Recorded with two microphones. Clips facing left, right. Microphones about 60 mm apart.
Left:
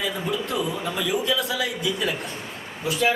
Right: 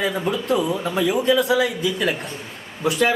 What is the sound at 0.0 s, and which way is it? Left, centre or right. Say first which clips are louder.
Speech: right 4 dB; right.